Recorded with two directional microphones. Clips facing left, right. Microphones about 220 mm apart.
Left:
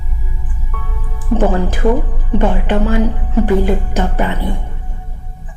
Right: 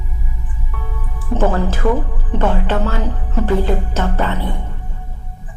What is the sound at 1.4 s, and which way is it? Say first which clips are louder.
Speech: left 1 dB; 15° left (ahead or behind).